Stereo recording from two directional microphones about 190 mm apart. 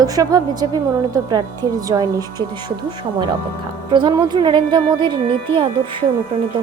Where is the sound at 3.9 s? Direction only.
25° right (ahead or behind).